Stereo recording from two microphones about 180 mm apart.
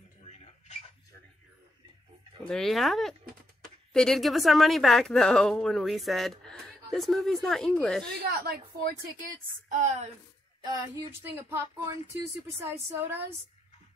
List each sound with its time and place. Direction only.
2.4 s speech: 5° left (ahead or behind)
8.1 s a woman's voice: 60° right (ahead or behind)
9.7 s a woman's voice: 40° right (ahead or behind)
11.3 s speech: 15° right (ahead or behind)